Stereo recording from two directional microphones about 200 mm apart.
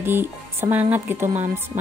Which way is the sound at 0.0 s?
10° right (ahead or behind).